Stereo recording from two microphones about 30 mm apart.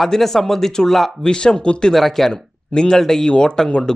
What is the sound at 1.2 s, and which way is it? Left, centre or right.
Speech, left.